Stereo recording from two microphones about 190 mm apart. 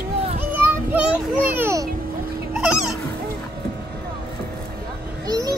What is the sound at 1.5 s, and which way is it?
Music, 15° right (ahead or behind).